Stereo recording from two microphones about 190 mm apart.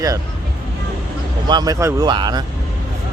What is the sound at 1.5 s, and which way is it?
Speech, 20° right (ahead or behind).